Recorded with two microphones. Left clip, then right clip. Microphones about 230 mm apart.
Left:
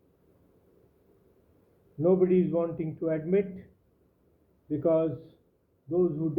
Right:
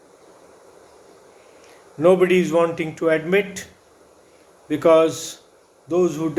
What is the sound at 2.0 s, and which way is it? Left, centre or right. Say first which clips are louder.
Speech: right 9 dB; right.